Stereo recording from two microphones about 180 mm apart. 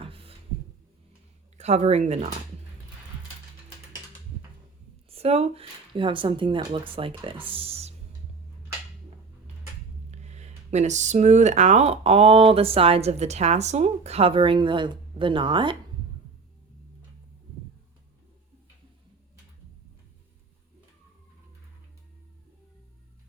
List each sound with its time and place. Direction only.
0.0 s a sound: 30° right (ahead or behind)
1.5 s speech: 40° right (ahead or behind)
5.0 s speech: 35° right (ahead or behind)
10.1 s speech: 40° right (ahead or behind)